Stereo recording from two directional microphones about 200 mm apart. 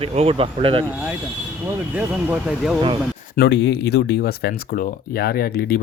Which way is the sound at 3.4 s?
60° left (ahead or behind).